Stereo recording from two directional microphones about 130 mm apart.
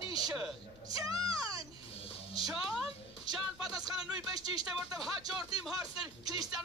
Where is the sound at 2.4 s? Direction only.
Centre (ahead or behind).